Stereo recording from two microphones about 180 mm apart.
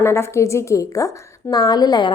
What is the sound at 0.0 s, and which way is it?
A woman's voice, 15° left (ahead or behind).